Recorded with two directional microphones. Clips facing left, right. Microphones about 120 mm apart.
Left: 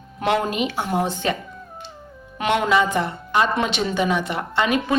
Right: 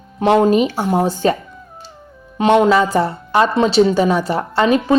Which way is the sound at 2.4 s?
30° right (ahead or behind).